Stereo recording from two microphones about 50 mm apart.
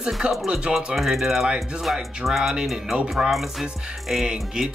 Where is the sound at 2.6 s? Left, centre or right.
Centre.